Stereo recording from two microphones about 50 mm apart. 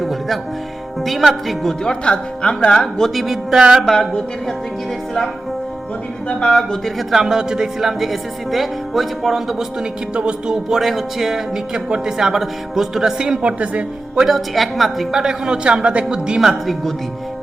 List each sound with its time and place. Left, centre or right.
0.0 s music: centre
1.0 s a woman's voice: centre
1.8 s speech: centre
3.2 s speech: centre
3.8 s a woman's voice: centre
6.2 s speech: centre
7.1 s a woman's voice: centre
10.2 s speech: centre
14.2 s a woman's voice: centre
15.2 s a man's voice: centre
16.4 s a woman's voice: centre